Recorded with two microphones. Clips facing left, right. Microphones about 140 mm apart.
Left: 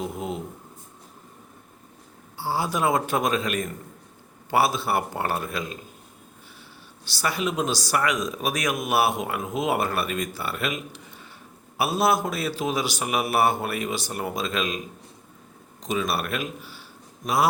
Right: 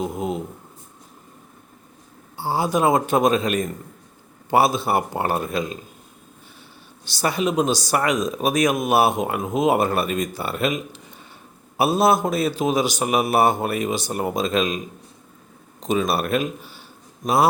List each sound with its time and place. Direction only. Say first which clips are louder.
0.0 s speech: right 5 dB; 15° right (ahead or behind)
2.4 s a man's voice: right 5 dB; 20° right (ahead or behind)
7.0 s a man's voice: right 5 dB; 20° right (ahead or behind)
15.8 s a man's voice: right 5 dB; 25° right (ahead or behind)